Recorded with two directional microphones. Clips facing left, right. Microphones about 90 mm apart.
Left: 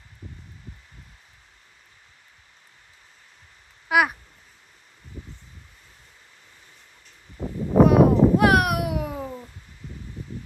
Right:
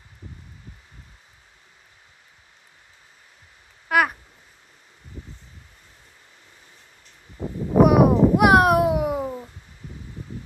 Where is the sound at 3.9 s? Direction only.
5° left (ahead or behind).